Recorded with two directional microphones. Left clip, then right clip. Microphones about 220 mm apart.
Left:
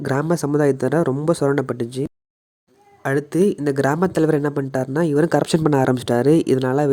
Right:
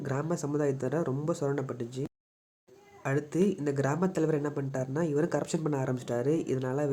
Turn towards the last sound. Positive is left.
turn(degrees=45)  # may be behind; listen again after turning